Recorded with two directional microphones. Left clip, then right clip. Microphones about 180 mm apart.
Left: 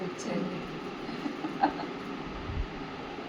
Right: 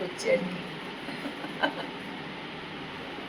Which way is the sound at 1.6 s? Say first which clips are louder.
Left 1 dB; 30° right (ahead or behind).